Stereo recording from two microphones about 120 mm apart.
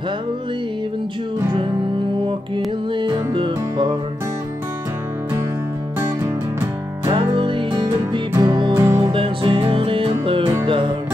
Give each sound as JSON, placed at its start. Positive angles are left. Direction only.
{"t": 2.2, "sound": "music", "side_deg": -40}
{"t": 7.1, "sound": "music", "side_deg": -45}
{"t": 8.3, "sound": "music", "side_deg": -30}
{"t": 8.7, "sound": "music", "side_deg": -25}
{"t": 9.1, "sound": "music", "side_deg": -50}